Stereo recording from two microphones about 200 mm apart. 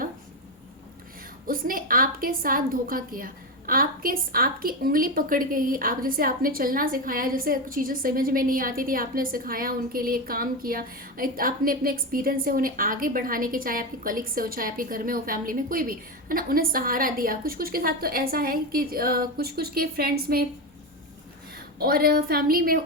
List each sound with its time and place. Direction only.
1.5 s a woman's voice: 45° right (ahead or behind)
21.8 s a woman's voice: 50° right (ahead or behind)